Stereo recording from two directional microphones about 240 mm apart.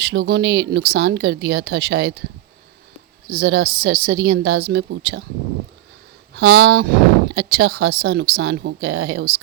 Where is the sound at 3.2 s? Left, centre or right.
Right.